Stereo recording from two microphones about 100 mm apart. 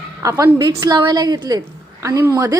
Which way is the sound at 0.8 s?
45° right (ahead or behind).